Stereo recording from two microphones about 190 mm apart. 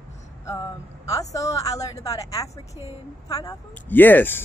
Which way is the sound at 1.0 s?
15° left (ahead or behind).